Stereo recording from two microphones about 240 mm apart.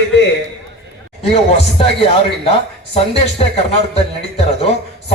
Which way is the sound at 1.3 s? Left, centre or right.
Left.